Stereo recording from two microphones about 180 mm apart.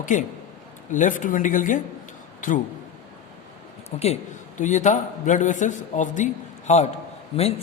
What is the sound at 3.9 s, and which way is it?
A man's voice, 35° left (ahead or behind).